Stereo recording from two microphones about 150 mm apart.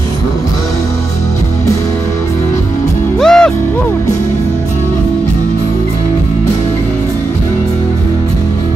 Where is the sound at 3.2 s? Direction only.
5° left (ahead or behind).